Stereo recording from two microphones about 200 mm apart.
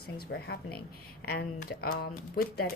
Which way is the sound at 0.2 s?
55° left (ahead or behind).